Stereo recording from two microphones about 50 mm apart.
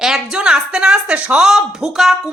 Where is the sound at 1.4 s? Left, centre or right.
Centre.